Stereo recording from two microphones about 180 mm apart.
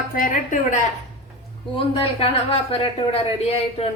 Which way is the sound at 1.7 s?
30° left (ahead or behind).